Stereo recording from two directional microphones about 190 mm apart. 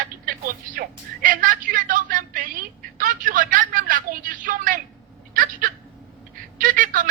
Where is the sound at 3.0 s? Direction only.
45° right (ahead or behind).